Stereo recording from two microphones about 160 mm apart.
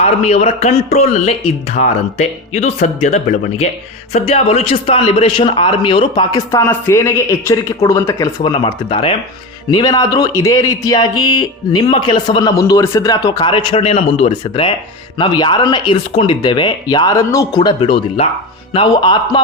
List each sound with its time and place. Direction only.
0.0 s a man's voice: 40° left (ahead or behind)
6.3 s speech: 15° left (ahead or behind)
8.4 s a man's voice: 35° left (ahead or behind)